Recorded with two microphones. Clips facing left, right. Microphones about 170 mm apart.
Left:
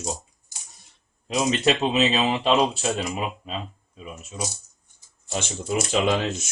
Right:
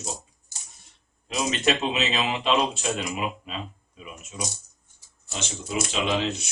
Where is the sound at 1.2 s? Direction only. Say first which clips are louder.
Left 3 dB; 35° left (ahead or behind).